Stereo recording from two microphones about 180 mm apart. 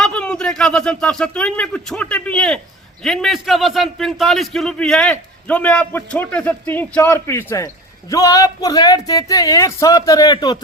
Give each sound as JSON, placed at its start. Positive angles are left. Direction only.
{"t": 0.0, "sound": "a man's voice", "side_deg": 5}